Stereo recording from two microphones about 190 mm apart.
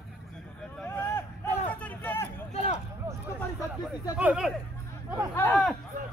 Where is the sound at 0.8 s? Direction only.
10° left (ahead or behind).